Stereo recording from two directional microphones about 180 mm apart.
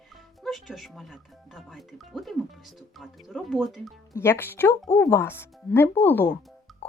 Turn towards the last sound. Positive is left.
turn(degrees=0)  # may be behind; listen again after turning